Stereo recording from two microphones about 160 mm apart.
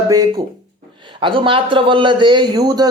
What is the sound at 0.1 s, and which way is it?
A man's voice, 20° right (ahead or behind).